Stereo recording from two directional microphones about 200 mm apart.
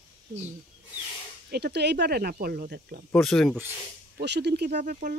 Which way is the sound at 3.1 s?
Centre (ahead or behind).